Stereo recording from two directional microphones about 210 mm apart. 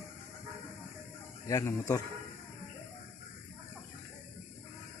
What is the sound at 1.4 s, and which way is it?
Speech, 15° left (ahead or behind).